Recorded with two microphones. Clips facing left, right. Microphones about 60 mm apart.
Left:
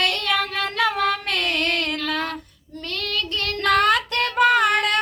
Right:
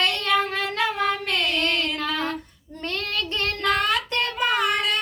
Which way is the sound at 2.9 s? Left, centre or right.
Right.